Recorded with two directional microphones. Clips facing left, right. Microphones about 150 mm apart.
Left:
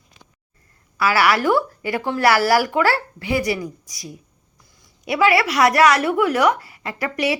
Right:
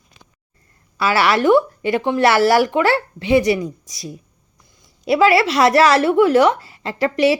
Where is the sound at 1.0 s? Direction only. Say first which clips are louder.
Right 1 dB; 25° right (ahead or behind).